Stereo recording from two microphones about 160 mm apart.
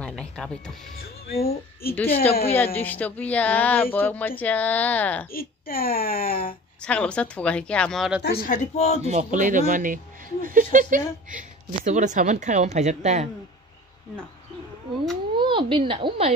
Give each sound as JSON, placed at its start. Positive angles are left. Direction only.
{"t": 0.0, "sound": "music", "side_deg": 5}
{"t": 1.4, "sound": "speech", "side_deg": 70}
{"t": 2.0, "sound": "speech", "side_deg": 40}
{"t": 2.5, "sound": "speech", "side_deg": 15}
{"t": 5.3, "sound": "speech", "side_deg": 65}
{"t": 6.8, "sound": "speech", "side_deg": 5}
{"t": 8.2, "sound": "speech", "side_deg": 85}
{"t": 8.5, "sound": "speech", "side_deg": 40}
{"t": 9.0, "sound": "speech", "side_deg": -45}
{"t": 15.3, "sound": "speech", "side_deg": -30}